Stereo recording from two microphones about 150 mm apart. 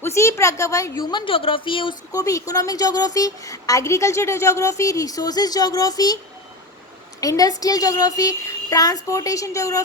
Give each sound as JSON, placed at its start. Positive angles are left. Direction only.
{"t": 0.0, "sound": "a woman's voice", "side_deg": 20}
{"t": 2.1, "sound": "a woman's voice", "side_deg": 20}
{"t": 7.2, "sound": "a woman's voice", "side_deg": 25}